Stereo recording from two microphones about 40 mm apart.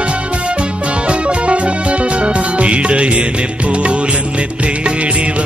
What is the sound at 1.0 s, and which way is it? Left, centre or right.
Music, right.